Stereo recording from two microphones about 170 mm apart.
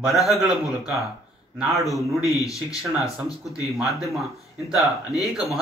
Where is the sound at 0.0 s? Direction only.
Centre (ahead or behind).